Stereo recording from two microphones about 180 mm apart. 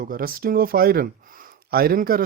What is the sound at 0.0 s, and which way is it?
Speech, 50° right (ahead or behind).